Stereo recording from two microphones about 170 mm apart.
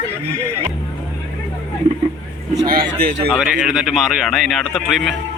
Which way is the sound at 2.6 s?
60° right (ahead or behind).